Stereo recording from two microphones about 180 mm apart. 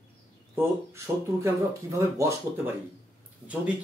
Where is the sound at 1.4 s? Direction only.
15° right (ahead or behind).